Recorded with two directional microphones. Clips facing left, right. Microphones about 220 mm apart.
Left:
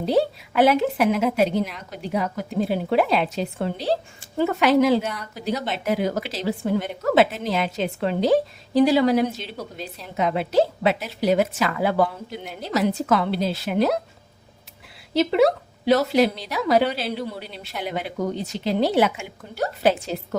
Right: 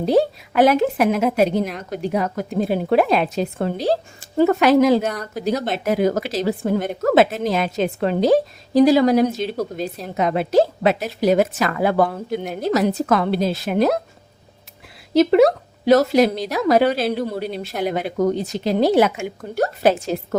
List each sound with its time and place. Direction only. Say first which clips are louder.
0.0 s speech: right 4 dB; 45° right (ahead or behind)
15.1 s speech: right 5 dB; 45° right (ahead or behind)